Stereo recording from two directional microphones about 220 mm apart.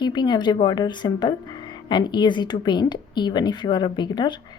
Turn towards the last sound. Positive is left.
turn(degrees=20)  # may be behind; listen again after turning